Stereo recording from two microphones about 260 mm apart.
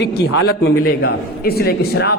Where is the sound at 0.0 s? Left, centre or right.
Left.